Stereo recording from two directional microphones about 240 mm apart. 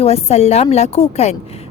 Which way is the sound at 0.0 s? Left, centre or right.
Left.